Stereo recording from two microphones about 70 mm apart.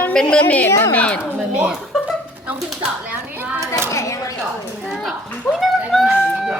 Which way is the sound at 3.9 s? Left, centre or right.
Left.